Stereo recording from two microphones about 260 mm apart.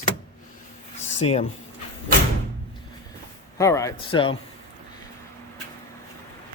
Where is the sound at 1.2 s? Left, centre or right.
Left.